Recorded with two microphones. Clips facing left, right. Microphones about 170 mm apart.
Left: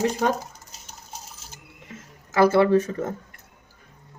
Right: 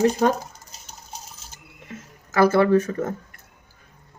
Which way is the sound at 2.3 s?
20° left (ahead or behind).